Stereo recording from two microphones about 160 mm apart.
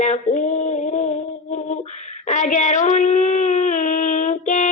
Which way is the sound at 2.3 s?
50° left (ahead or behind).